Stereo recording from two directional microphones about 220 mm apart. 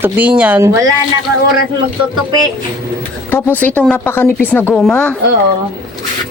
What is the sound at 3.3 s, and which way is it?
A woman's voice, 10° left (ahead or behind).